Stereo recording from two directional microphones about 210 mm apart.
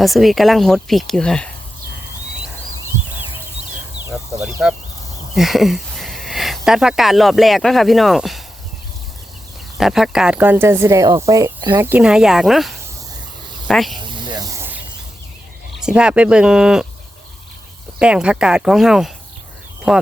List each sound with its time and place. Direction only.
0.0 s speech: centre (ahead or behind)
4.1 s speech: centre (ahead or behind)
9.7 s speech: centre (ahead or behind)
11.9 s speech: 5° right (ahead or behind)
14.0 s snake: 20° right (ahead or behind)
15.8 s speech: 5° right (ahead or behind)
18.0 s speech: 5° right (ahead or behind)